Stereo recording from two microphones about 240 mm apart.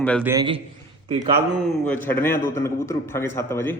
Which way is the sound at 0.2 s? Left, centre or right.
Centre.